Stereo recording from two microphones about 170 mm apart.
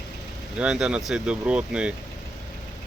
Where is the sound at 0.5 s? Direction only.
5° right (ahead or behind).